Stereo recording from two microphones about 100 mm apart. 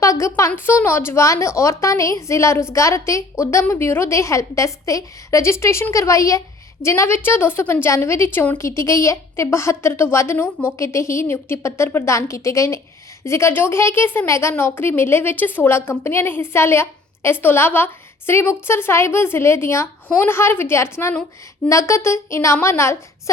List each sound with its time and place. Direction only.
0.0 s a woman's voice: 30° left (ahead or behind)